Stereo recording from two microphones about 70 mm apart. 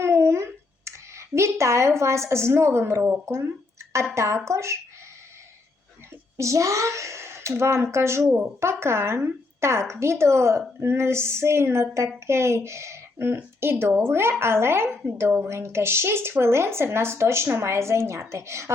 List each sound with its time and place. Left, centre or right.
0.0 s a sound: right
3.1 s speech: right
6.3 s speech: right